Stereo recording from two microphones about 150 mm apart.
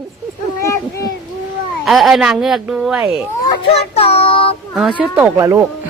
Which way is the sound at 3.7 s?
40° left (ahead or behind).